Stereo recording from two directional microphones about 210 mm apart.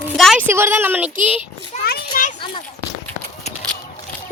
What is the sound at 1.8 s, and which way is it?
Children playing, 45° left (ahead or behind).